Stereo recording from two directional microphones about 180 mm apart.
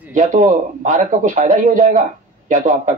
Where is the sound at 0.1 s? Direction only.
45° right (ahead or behind).